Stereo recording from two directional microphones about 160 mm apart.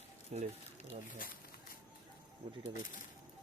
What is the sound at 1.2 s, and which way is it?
Speech, 60° left (ahead or behind).